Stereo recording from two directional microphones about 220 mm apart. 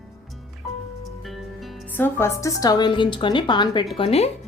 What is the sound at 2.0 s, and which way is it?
A woman's voice, 10° left (ahead or behind).